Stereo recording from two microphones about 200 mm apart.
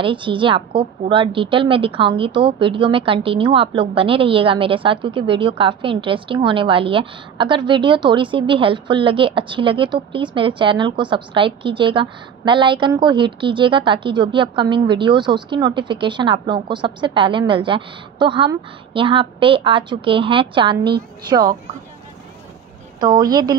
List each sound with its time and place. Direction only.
0.0 s a woman's voice: 25° right (ahead or behind)
22.9 s a woman's voice: 20° right (ahead or behind)